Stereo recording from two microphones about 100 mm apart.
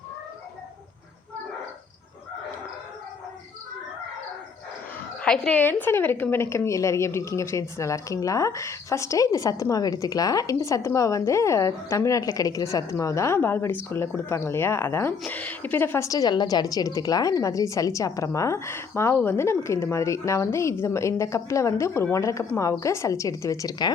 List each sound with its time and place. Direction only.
5.2 s a woman's voice: 10° left (ahead or behind)
16.0 s a woman's voice: 40° left (ahead or behind)